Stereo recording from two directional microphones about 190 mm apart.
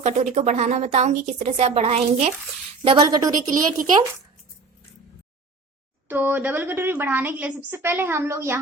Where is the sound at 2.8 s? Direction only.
20° right (ahead or behind).